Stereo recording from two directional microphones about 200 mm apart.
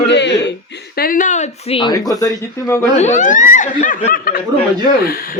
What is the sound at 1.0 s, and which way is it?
Speech, 40° left (ahead or behind).